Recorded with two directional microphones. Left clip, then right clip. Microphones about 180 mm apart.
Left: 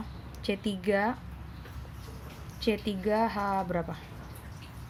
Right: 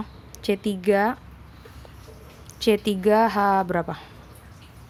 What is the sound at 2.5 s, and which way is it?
A woman's voice, 50° right (ahead or behind).